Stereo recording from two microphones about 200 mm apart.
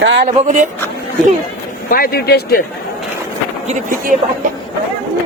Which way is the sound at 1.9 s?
50° left (ahead or behind).